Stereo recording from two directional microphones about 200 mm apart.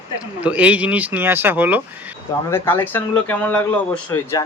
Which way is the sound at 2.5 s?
10° left (ahead or behind).